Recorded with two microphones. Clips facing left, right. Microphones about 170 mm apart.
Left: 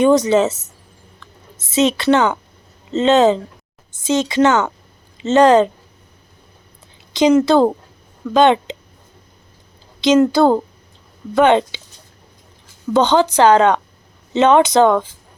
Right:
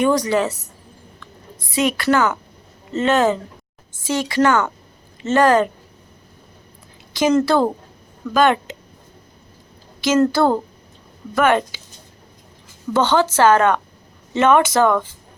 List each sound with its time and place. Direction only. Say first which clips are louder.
0.0 s a woman's voice: left 5 dB; 20° left (ahead or behind)
7.1 s a sound: left 4 dB; 20° left (ahead or behind)
7.4 s a woman's voice: left 4 dB; 20° left (ahead or behind)
10.0 s a woman's voice: left 4 dB; 20° left (ahead or behind)
12.9 s a woman's voice: left 3 dB; 20° left (ahead or behind)